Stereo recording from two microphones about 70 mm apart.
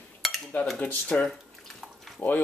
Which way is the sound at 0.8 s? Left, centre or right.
Centre.